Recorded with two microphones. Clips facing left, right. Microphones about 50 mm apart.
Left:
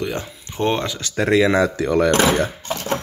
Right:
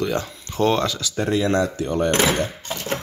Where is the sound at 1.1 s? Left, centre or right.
Left.